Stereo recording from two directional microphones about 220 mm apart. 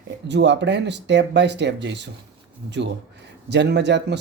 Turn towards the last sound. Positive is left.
turn(degrees=-50)  # may be behind; listen again after turning